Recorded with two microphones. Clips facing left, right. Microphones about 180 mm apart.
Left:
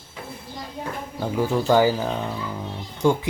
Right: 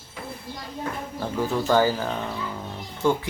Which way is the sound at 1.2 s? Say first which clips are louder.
Left 3 dB; 10° left (ahead or behind).